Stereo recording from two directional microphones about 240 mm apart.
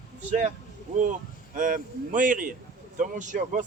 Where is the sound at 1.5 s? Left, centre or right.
Right.